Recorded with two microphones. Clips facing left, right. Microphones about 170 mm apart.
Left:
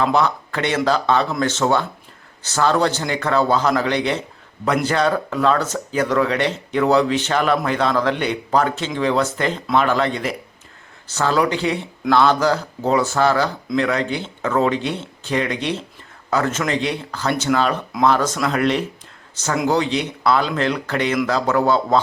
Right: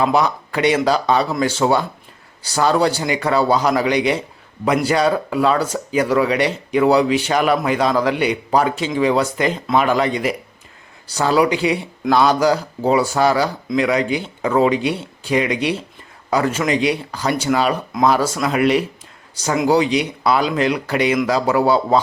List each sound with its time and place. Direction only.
0.0 s speech: 10° right (ahead or behind)